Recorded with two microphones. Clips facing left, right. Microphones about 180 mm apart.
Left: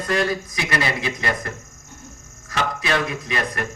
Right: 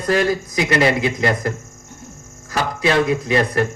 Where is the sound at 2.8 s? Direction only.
30° right (ahead or behind).